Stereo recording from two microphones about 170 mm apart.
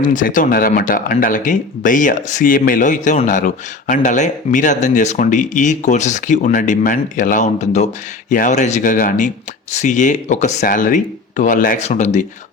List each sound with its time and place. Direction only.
0.0 s speech: 50° left (ahead or behind)